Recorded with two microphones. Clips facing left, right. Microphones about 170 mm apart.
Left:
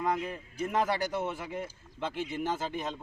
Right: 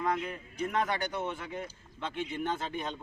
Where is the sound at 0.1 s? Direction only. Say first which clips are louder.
Left 1 dB; 25° left (ahead or behind).